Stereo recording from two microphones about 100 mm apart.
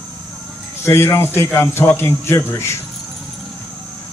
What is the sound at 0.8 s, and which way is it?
A man's voice, 25° left (ahead or behind).